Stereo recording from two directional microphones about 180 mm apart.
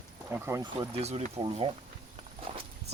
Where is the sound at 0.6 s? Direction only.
25° right (ahead or behind).